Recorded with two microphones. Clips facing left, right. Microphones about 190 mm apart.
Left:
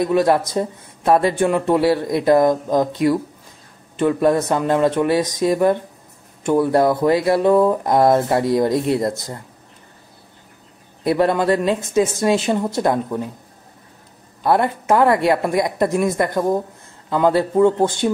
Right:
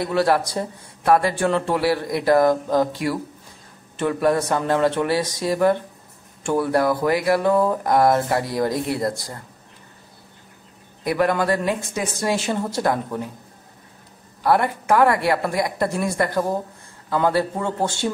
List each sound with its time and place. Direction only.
0.0 s a man's voice: 20° left (ahead or behind)
11.1 s a man's voice: 25° left (ahead or behind)
14.4 s a man's voice: 20° left (ahead or behind)